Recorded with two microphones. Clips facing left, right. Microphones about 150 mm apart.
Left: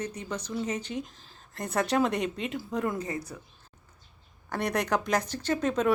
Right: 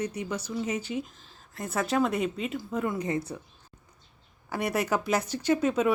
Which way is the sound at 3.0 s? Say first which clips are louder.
Right 5 dB; 25° right (ahead or behind).